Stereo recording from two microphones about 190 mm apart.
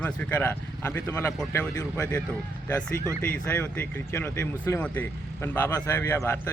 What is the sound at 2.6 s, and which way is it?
Speech, 10° left (ahead or behind).